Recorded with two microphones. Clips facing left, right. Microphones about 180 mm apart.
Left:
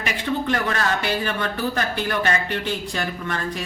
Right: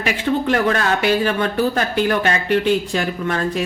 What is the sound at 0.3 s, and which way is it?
Speech, 55° right (ahead or behind).